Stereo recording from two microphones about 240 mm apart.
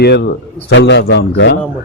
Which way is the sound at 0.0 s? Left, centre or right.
Left.